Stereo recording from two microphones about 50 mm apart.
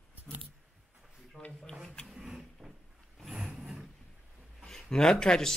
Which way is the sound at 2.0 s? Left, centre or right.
Centre.